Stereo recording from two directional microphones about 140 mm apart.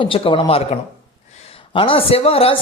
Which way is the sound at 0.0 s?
40° left (ahead or behind).